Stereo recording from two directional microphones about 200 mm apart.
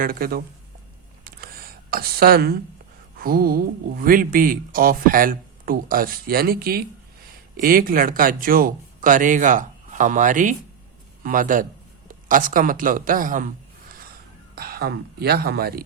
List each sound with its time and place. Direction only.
0.0 s speech: 45° right (ahead or behind)
1.2 s a sound: 50° right (ahead or behind)
3.2 s a man's voice: 50° right (ahead or behind)
14.5 s speech: 50° right (ahead or behind)